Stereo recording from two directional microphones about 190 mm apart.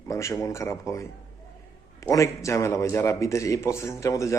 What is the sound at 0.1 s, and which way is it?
A man's voice, 15° left (ahead or behind).